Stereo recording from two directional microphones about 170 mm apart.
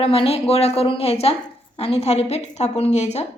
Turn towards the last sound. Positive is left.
turn(degrees=40)  # may be behind; listen again after turning